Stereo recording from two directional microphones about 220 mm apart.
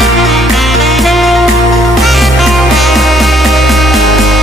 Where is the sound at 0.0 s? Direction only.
Centre (ahead or behind).